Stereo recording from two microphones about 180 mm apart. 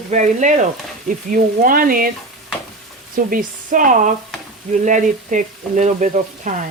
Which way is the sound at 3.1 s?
50° right (ahead or behind).